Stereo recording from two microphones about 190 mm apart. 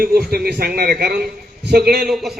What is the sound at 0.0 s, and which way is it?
A man's voice, 55° right (ahead or behind).